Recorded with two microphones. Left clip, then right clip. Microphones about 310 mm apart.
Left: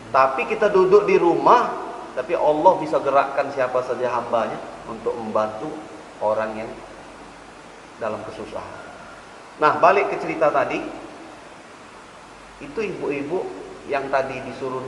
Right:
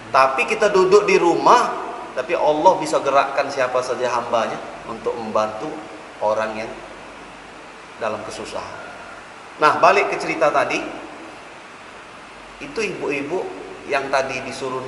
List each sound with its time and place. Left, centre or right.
0.1 s a man's voice: centre
4.9 s a man's voice: centre
8.0 s a man's voice: centre
12.7 s a man's voice: centre
14.6 s a man's voice: left